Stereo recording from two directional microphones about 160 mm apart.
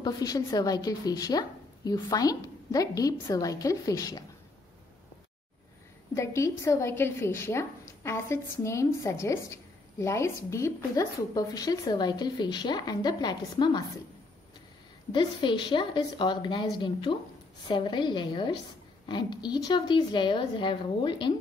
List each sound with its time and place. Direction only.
0.0 s a woman's voice: 25° left (ahead or behind)
6.1 s a woman's voice: 20° left (ahead or behind)
15.1 s a woman's voice: 30° left (ahead or behind)